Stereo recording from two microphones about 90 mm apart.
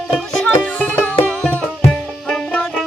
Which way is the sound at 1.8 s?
10° left (ahead or behind).